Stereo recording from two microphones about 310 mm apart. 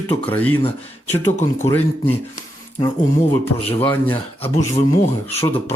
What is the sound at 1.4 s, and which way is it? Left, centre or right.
Speech, left.